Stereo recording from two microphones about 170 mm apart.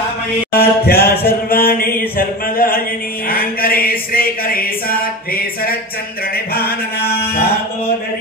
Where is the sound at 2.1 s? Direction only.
60° left (ahead or behind).